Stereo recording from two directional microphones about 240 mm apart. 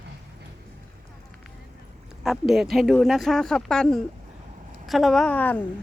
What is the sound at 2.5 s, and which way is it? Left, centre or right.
A woman's voice, centre.